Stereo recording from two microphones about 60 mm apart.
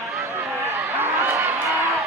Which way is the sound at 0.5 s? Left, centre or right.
Right.